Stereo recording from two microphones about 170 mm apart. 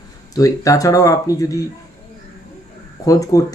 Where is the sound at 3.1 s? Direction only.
20° left (ahead or behind).